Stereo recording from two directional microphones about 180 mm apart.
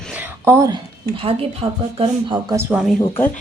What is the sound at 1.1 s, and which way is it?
Speech, 30° right (ahead or behind).